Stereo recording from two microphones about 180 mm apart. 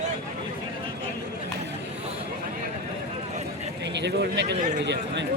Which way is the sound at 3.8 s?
75° right (ahead or behind).